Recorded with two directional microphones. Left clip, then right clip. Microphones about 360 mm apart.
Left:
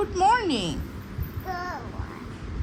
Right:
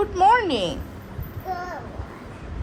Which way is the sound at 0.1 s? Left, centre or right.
Centre.